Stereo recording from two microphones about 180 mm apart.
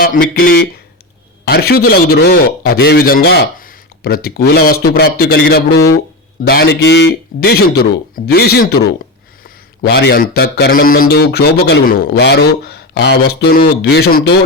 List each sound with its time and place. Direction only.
0.0 s speech: 55° left (ahead or behind)
9.8 s speech: 65° left (ahead or behind)